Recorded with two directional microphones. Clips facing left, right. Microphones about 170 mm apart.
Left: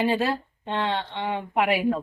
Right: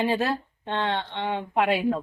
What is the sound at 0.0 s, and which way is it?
A woman's voice, 10° left (ahead or behind).